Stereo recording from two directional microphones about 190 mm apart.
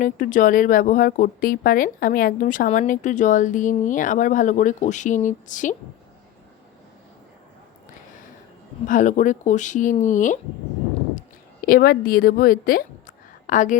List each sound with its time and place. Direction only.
0.0 s a woman's voice: 45° left (ahead or behind)
8.9 s a woman's voice: 40° left (ahead or behind)
11.6 s a woman's voice: 50° left (ahead or behind)